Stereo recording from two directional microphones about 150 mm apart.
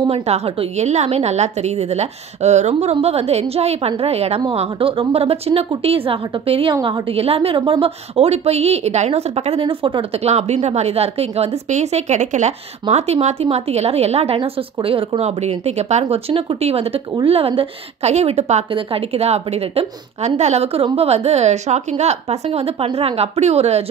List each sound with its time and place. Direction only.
0.0 s a woman's voice: 40° right (ahead or behind)